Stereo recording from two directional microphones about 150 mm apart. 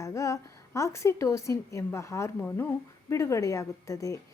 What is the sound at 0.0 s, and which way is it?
A woman's voice, 20° left (ahead or behind).